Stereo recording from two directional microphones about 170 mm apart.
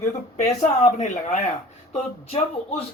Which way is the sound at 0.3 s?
40° left (ahead or behind).